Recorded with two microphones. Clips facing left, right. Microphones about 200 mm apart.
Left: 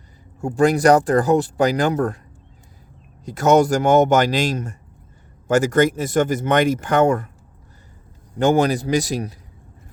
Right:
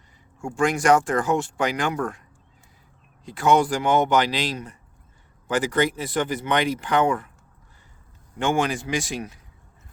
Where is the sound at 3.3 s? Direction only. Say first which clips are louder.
Left 5 dB; 45° left (ahead or behind).